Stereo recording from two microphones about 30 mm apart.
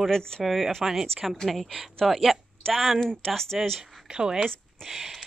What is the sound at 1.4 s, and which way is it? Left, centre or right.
Speech, centre.